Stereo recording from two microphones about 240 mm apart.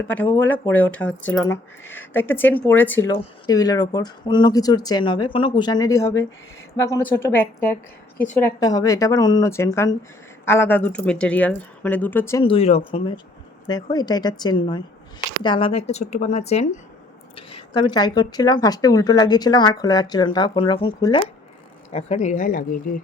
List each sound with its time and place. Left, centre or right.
0.3 s speech: centre
12.4 s a woman's voice: left